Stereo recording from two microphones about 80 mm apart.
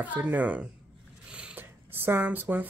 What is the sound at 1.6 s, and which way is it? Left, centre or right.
Speech, right.